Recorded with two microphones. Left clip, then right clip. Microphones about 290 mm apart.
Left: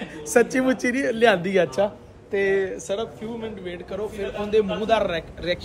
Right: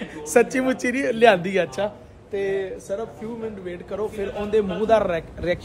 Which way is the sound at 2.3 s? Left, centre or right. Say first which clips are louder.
Left 3 dB; left.